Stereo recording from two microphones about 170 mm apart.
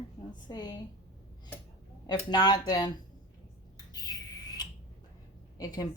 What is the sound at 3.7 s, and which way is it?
Bird, 20° left (ahead or behind).